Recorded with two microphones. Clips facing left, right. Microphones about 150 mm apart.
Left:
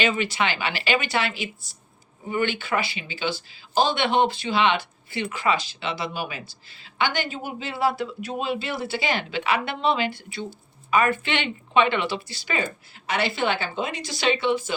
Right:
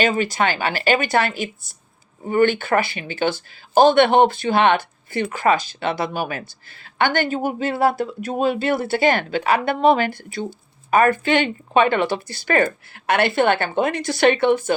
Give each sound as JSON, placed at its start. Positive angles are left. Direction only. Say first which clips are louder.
{"t": 0.0, "sound": "speech", "louder": "right 5 dB", "side_deg": -45}